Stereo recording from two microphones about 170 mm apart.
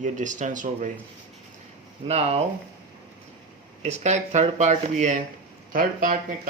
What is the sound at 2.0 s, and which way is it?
Speech, 35° right (ahead or behind).